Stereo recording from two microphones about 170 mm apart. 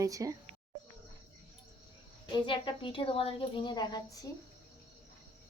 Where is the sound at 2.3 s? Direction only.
30° left (ahead or behind).